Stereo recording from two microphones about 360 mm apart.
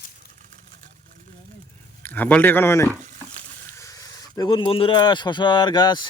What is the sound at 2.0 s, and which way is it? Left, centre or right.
Speech, centre.